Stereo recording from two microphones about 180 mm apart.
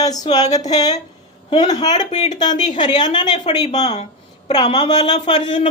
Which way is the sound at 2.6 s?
40° left (ahead or behind).